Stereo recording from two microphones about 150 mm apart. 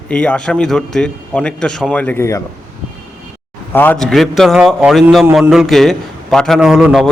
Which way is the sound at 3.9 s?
5° left (ahead or behind).